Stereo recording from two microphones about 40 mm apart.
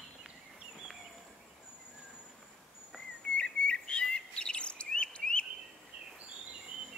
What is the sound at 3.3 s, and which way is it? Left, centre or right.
Chirp, left.